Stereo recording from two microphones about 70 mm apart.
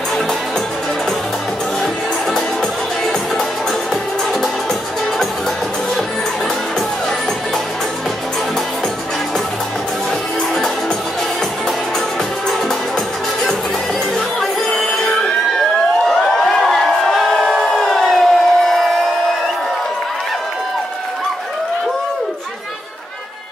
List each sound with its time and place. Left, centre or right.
2.3 s music: centre
14.1 s music: centre
16.1 s a sound: centre